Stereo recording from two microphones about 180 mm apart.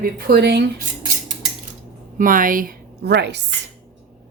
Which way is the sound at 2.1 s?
50° right (ahead or behind).